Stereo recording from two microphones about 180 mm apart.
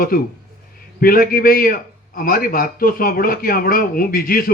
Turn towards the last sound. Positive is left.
turn(degrees=55)  # may be behind; listen again after turning